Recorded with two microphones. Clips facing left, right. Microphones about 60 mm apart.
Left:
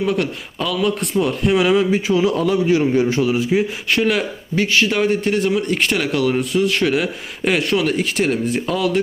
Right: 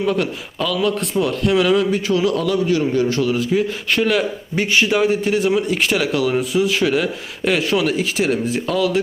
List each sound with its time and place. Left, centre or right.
0.0 s a man's voice: centre
3.8 s a man's voice: centre
4.5 s speech: centre
4.9 s a man's voice: centre